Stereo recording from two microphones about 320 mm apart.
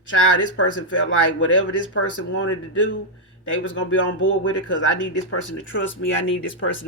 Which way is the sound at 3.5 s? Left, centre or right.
Left.